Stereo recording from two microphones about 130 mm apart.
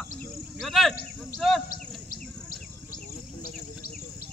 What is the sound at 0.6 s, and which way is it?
Speech, centre (ahead or behind).